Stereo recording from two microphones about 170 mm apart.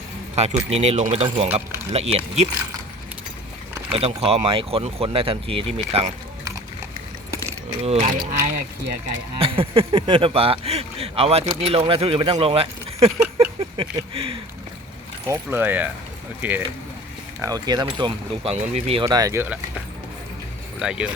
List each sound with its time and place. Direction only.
0.3 s speech: 40° right (ahead or behind)
3.9 s speech: 35° right (ahead or behind)
7.4 s speech: 35° right (ahead or behind)
9.4 s speech: 30° right (ahead or behind)
15.3 s speech: 10° right (ahead or behind)
17.4 s speech: 25° right (ahead or behind)
18.5 s speech: 40° right (ahead or behind)
19.0 s speech: 20° right (ahead or behind)
20.7 s speech: 5° right (ahead or behind)